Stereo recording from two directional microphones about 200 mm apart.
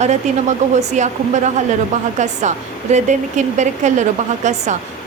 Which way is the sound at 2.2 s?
35° right (ahead or behind).